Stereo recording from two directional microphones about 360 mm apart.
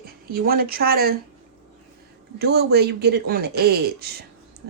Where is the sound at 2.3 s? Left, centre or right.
Right.